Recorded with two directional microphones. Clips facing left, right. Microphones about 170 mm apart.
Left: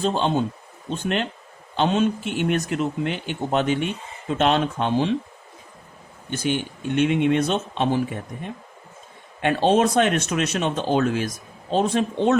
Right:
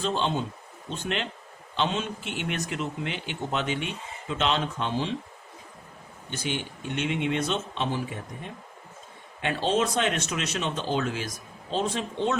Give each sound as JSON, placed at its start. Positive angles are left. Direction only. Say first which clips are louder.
{"t": 0.0, "sound": "a man's voice", "louder": "left 6 dB", "side_deg": 50}
{"t": 6.4, "sound": "a man's voice", "louder": "left 7 dB", "side_deg": 50}
{"t": 9.4, "sound": "a man's voice", "louder": "left 7 dB", "side_deg": 60}